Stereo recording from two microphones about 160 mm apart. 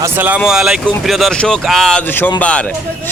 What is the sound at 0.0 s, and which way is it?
Speech, 10° right (ahead or behind).